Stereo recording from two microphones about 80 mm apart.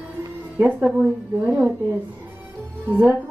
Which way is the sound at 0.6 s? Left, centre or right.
Centre.